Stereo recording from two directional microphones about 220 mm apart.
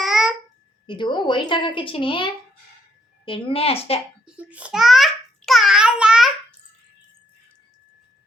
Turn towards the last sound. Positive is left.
turn(degrees=-5)  # may be behind; listen again after turning